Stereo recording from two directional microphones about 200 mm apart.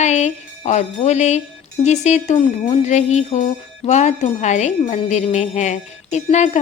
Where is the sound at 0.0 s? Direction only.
35° left (ahead or behind).